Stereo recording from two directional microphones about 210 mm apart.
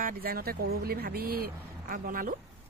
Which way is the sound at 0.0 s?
45° right (ahead or behind).